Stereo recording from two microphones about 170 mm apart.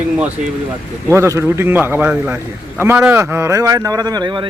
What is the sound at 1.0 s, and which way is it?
A man's voice, 15° right (ahead or behind).